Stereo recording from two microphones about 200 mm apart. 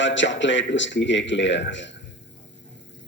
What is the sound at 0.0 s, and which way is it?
Speech, 65° left (ahead or behind).